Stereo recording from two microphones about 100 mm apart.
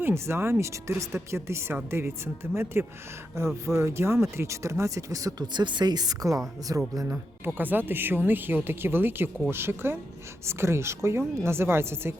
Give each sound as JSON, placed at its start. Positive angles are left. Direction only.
{"t": 0.0, "sound": "a woman's voice", "side_deg": -25}
{"t": 7.4, "sound": "a woman's voice", "side_deg": -20}